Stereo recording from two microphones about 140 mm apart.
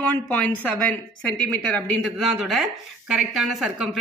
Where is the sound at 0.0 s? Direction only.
10° left (ahead or behind).